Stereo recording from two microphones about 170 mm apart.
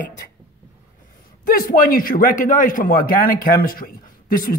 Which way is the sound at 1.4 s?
55° left (ahead or behind).